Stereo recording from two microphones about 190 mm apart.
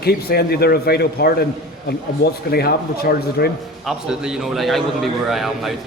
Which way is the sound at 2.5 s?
55° left (ahead or behind).